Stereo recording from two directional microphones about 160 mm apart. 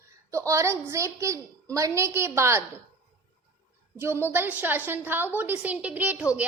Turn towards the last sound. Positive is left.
turn(degrees=-10)  # may be behind; listen again after turning